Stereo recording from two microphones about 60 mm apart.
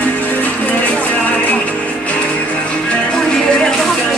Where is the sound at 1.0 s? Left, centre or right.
Left.